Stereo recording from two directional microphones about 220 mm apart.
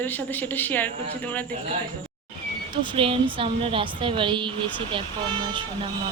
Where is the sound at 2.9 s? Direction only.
25° right (ahead or behind).